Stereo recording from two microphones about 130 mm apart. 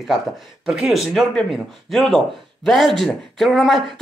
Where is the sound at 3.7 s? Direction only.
40° right (ahead or behind).